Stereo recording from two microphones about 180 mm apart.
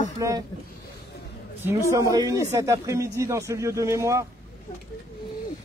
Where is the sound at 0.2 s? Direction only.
20° right (ahead or behind).